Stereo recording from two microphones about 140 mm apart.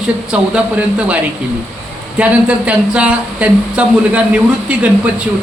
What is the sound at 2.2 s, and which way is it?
A man's voice, 10° right (ahead or behind).